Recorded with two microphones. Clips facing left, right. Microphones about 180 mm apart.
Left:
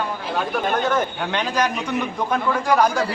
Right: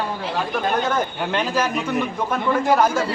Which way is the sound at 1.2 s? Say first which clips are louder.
Even; 5° right (ahead or behind).